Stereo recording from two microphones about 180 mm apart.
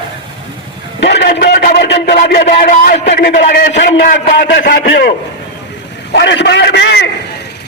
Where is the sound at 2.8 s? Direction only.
55° left (ahead or behind).